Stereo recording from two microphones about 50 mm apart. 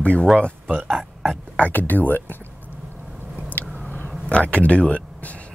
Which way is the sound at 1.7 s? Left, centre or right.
Left.